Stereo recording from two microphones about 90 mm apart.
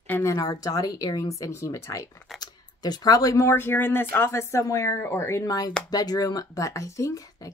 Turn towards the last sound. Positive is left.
turn(degrees=40)  # may be behind; listen again after turning